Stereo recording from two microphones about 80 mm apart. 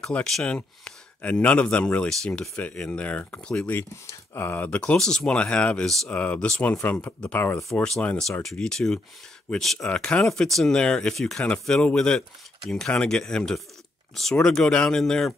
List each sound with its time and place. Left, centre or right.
0.0 s speech: centre
3.7 s speech: left
8.2 s speech: centre